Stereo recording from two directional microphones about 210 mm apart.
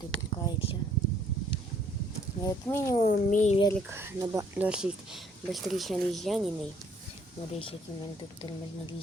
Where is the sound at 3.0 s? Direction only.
35° left (ahead or behind).